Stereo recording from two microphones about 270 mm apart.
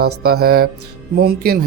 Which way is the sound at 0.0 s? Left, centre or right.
Right.